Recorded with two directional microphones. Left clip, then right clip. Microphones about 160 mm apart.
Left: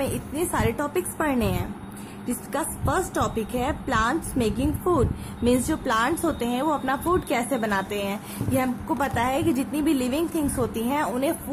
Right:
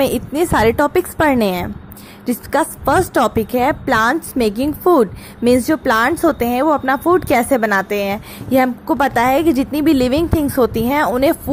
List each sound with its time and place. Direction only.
0.0 s a woman's voice: 55° right (ahead or behind)